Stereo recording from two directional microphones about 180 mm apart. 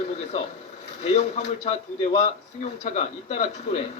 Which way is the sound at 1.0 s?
35° left (ahead or behind).